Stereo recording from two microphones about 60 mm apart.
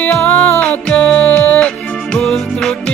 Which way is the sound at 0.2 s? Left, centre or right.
Left.